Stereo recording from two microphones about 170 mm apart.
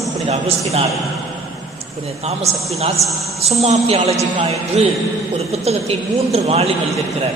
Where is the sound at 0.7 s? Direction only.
35° right (ahead or behind).